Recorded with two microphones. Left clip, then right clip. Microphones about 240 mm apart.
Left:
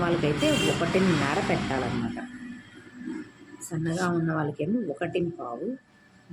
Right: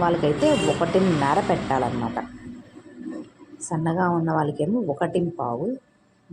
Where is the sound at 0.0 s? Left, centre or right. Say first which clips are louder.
Right 5 dB; centre.